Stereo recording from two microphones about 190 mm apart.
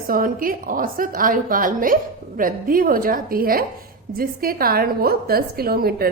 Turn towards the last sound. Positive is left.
turn(degrees=-55)  # may be behind; listen again after turning